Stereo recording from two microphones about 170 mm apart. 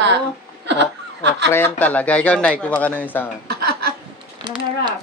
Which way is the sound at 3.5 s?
70° right (ahead or behind).